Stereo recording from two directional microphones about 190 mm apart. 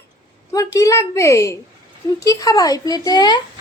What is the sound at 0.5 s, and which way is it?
A woman's voice, 15° left (ahead or behind).